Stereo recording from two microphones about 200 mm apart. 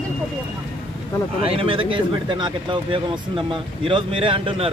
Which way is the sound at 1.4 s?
25° right (ahead or behind).